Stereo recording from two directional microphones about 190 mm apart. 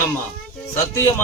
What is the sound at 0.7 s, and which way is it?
Speech, 10° left (ahead or behind).